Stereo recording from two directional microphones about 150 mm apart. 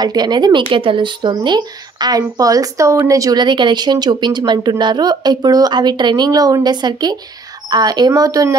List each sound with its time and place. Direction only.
0.0 s speech: 25° right (ahead or behind)